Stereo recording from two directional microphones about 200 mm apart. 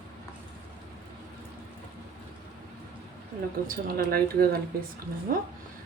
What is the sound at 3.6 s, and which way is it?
Speech, 50° right (ahead or behind).